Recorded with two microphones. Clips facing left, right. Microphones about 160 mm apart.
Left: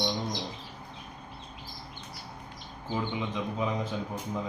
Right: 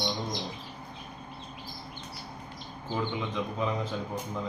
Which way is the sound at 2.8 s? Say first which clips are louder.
Even; 15° left (ahead or behind).